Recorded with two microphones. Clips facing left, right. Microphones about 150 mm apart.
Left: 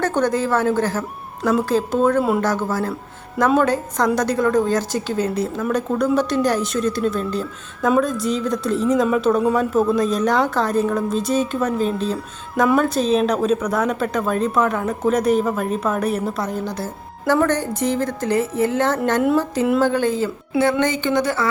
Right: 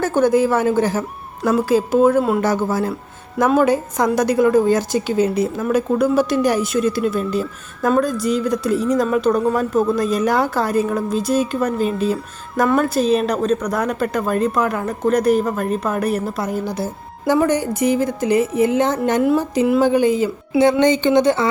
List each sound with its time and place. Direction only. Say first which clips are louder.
0.0 s a woman's voice: right 4 dB; 5° right (ahead or behind)